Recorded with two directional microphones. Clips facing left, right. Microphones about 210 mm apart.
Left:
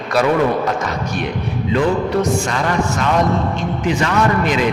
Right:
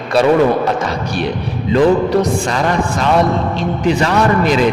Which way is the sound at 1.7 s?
35° right (ahead or behind).